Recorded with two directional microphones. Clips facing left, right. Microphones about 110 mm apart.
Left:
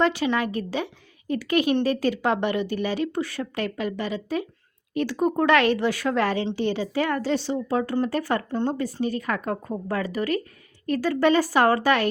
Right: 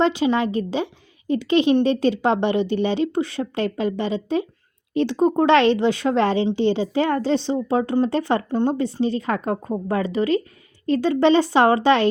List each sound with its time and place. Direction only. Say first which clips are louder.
0.0 s a woman's voice: right 4 dB; 20° right (ahead or behind)